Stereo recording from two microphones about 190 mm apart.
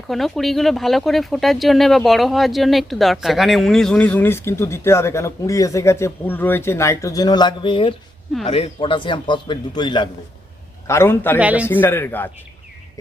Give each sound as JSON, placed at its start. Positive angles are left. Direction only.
{"t": 0.1, "sound": "a man's voice", "side_deg": 0}
{"t": 10.8, "sound": "a man's voice", "side_deg": 15}
{"t": 11.3, "sound": "speech", "side_deg": -5}
{"t": 11.7, "sound": "a man's voice", "side_deg": 10}